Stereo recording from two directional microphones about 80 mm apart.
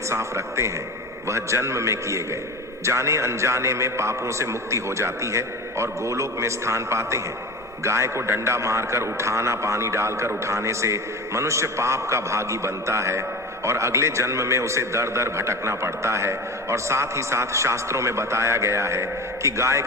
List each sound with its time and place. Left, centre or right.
0.1 s a man's voice: right